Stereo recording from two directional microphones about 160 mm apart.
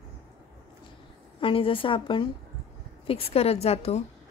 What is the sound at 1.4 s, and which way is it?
A woman's voice, 35° left (ahead or behind).